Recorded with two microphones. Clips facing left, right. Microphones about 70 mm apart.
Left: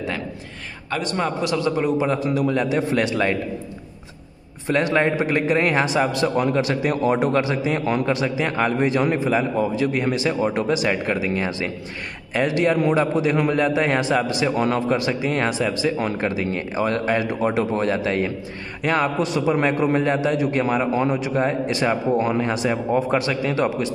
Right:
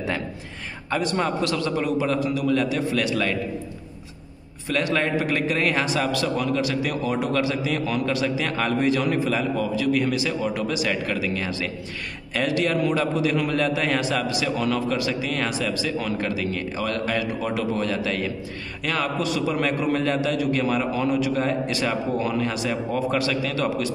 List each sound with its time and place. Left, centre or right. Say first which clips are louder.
0.8 s a man's voice: even; centre
1.9 s a man's voice: left 2 dB; left
4.6 s a man's voice: left 4 dB; left